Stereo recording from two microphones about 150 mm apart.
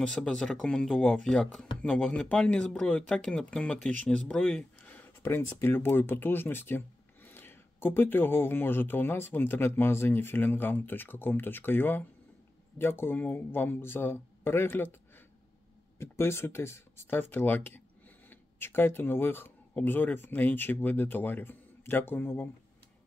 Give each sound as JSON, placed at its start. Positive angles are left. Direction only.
{"t": 0.0, "sound": "speech", "side_deg": 5}